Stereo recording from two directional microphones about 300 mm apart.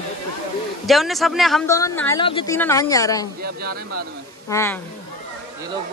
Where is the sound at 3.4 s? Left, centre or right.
Right.